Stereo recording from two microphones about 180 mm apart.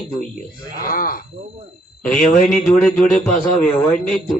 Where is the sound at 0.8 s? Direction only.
50° left (ahead or behind).